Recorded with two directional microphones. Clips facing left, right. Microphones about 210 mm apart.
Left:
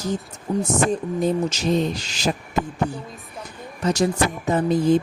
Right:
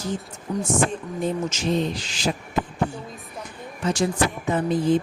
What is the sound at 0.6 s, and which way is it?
Speech, 35° left (ahead or behind).